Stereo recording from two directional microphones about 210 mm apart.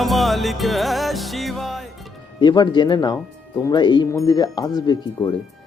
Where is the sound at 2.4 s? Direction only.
20° left (ahead or behind).